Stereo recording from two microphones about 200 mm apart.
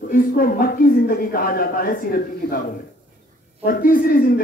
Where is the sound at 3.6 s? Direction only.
45° left (ahead or behind).